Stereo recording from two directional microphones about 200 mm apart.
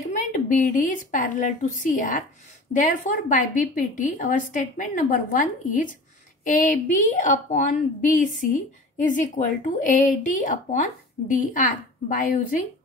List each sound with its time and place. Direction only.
0.3 s a woman's voice: 40° left (ahead or behind)